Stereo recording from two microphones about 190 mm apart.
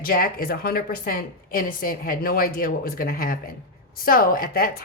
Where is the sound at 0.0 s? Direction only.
50° left (ahead or behind).